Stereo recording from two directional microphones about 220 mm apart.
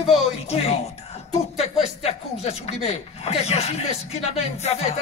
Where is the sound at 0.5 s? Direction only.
25° left (ahead or behind).